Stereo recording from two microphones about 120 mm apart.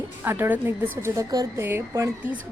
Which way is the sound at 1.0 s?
30° right (ahead or behind).